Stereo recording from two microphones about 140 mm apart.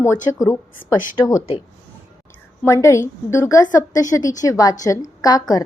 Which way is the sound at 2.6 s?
20° left (ahead or behind).